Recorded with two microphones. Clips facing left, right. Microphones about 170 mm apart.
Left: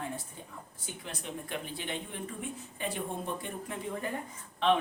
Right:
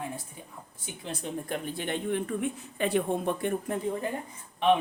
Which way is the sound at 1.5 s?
50° right (ahead or behind).